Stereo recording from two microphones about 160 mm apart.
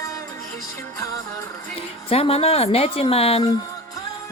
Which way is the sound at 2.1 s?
40° left (ahead or behind).